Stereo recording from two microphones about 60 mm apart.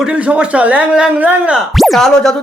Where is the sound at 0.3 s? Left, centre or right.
Right.